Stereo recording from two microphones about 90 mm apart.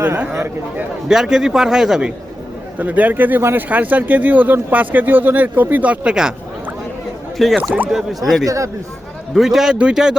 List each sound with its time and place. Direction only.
0.0 s speech: 20° right (ahead or behind)
1.0 s a man's voice: 5° right (ahead or behind)
7.3 s speech: centre (ahead or behind)
7.6 s speech: 15° right (ahead or behind)
7.9 s a man's voice: centre (ahead or behind)
8.4 s speech: 35° right (ahead or behind)
9.3 s a man's voice: 5° right (ahead or behind)